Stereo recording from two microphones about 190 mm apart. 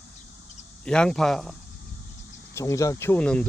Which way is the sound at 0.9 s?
5° left (ahead or behind).